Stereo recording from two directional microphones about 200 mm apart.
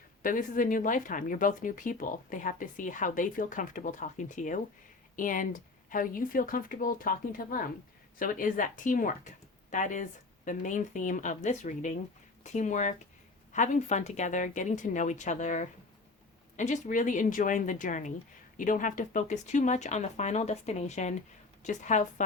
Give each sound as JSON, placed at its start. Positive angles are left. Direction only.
{"t": 0.2, "sound": "speech", "side_deg": 45}